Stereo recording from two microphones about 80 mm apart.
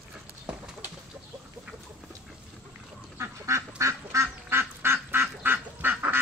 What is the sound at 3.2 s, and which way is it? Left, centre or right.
Duck, right.